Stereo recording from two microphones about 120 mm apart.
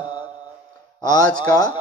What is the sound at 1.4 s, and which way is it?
Mantra, 35° left (ahead or behind).